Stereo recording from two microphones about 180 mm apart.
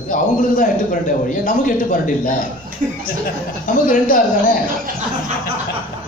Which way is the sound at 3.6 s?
45° left (ahead or behind).